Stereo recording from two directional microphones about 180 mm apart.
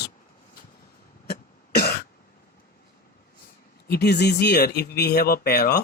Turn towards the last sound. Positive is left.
turn(degrees=60)  # may be behind; listen again after turning